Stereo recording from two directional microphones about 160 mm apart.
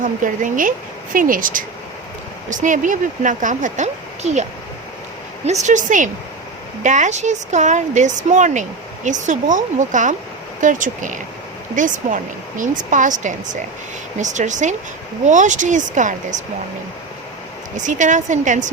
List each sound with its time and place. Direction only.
0.0 s speech: 55° right (ahead or behind)
5.6 s speech: 50° right (ahead or behind)
17.7 s speech: 50° right (ahead or behind)